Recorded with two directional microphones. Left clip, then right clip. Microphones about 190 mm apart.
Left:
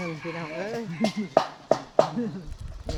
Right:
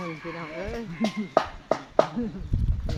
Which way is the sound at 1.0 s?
45° left (ahead or behind).